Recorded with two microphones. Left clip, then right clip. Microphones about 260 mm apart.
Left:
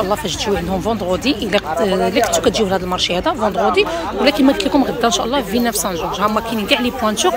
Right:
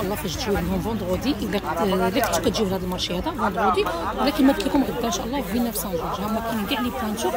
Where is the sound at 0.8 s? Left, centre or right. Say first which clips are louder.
Left 8 dB; centre.